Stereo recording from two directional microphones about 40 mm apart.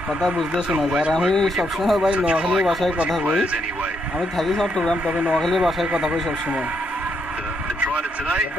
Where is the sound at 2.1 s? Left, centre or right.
Right.